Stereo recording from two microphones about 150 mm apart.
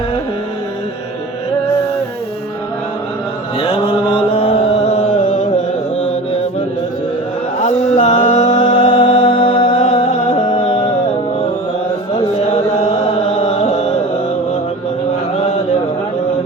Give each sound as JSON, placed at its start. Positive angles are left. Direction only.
{"t": 3.6, "sound": "mantra", "side_deg": 40}
{"t": 5.1, "sound": "carnatic music", "side_deg": 60}
{"t": 7.6, "sound": "mantra", "side_deg": 50}
{"t": 8.2, "sound": "music", "side_deg": 50}
{"t": 8.6, "sound": "music", "side_deg": 35}
{"t": 12.4, "sound": "music", "side_deg": 45}